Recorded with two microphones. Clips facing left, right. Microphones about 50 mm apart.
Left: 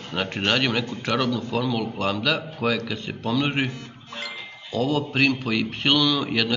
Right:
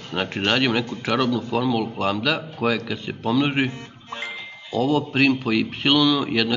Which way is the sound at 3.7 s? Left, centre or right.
Right.